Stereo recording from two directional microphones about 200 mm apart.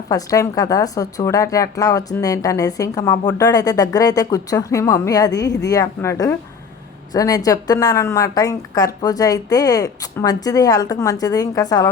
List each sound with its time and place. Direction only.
0.1 s speech: 15° left (ahead or behind)